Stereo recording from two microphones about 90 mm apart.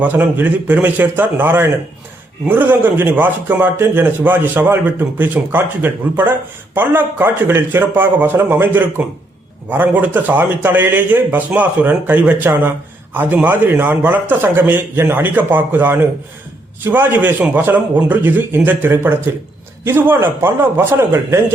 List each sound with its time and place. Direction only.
0.0 s a man's voice: 20° right (ahead or behind)